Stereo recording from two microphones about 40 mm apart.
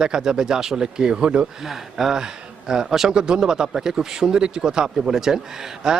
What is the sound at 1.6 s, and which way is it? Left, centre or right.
Speech, centre.